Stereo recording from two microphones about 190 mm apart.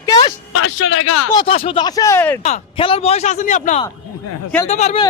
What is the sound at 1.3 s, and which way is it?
A man's voice, 30° left (ahead or behind).